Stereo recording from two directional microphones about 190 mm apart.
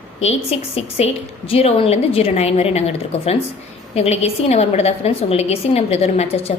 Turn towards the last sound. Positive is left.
turn(degrees=30)  # may be behind; listen again after turning